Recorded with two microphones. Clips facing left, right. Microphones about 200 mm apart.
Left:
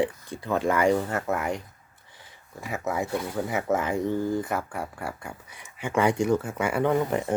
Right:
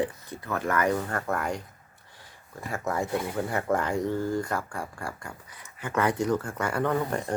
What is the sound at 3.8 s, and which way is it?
Speech, 20° left (ahead or behind).